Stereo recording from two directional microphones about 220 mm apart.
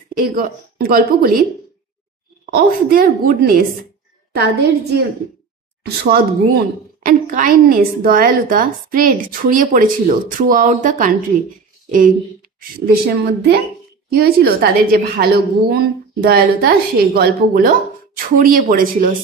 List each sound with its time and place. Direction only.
0.1 s a woman's voice: 40° right (ahead or behind)
2.5 s a woman's voice: 40° right (ahead or behind)
14.1 s a woman's voice: 45° right (ahead or behind)